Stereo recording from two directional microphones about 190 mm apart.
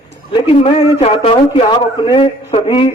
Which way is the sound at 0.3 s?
25° left (ahead or behind).